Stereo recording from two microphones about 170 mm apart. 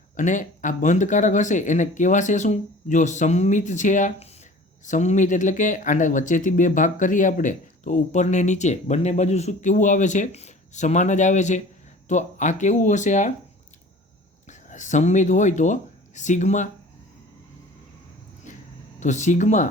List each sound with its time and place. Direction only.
0.2 s speech: 50° left (ahead or behind)
14.4 s speech: 45° left (ahead or behind)
18.5 s a sound: 50° left (ahead or behind)
18.9 s speech: 45° left (ahead or behind)